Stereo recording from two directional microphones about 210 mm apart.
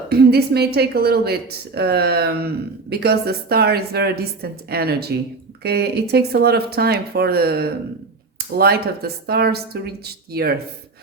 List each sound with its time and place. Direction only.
0.1 s speech: 50° right (ahead or behind)